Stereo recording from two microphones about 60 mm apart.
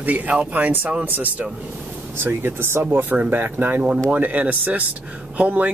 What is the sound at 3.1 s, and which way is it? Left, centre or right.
Speech, right.